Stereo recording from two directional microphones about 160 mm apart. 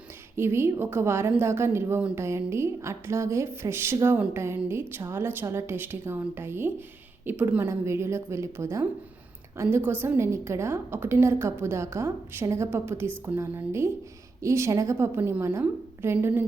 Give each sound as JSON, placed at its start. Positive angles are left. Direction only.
{"t": 0.3, "sound": "a woman's voice", "side_deg": -15}